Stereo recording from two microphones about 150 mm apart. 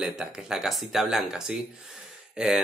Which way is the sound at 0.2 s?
5° right (ahead or behind).